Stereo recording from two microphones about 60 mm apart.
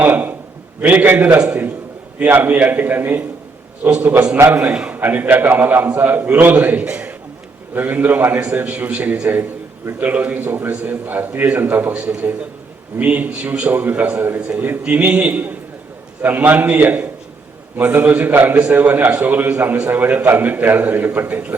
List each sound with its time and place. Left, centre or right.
0.0 s a man's voice: right
4.9 s a man's voice: right
8.7 s a man's voice: right
11.9 s a man's voice: centre